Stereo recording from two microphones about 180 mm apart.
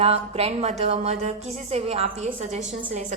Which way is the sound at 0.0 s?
35° right (ahead or behind).